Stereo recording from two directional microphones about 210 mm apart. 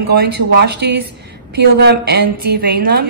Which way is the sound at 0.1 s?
50° right (ahead or behind).